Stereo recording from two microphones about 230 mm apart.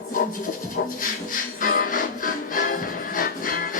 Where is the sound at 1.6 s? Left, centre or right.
Left.